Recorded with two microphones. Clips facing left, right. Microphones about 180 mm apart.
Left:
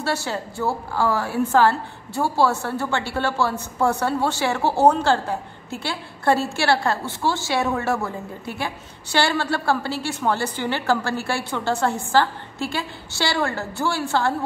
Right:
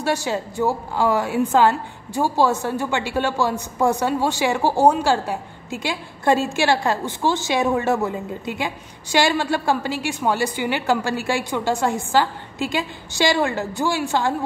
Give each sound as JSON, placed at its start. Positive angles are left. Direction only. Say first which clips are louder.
{"t": 0.0, "sound": "a woman's voice", "louder": "right 3 dB", "side_deg": -15}